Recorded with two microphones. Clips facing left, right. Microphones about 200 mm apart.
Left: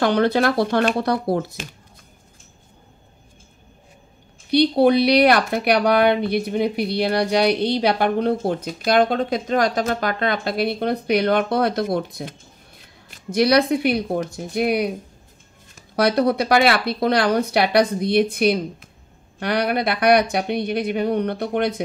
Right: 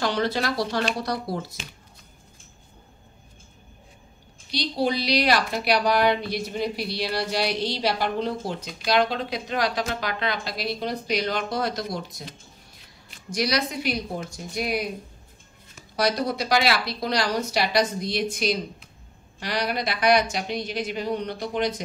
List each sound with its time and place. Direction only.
0.0 s speech: 55° left (ahead or behind)
4.5 s speech: 60° left (ahead or behind)
16.0 s speech: 60° left (ahead or behind)